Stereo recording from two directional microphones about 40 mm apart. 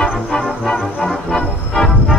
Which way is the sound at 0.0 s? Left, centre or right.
Centre.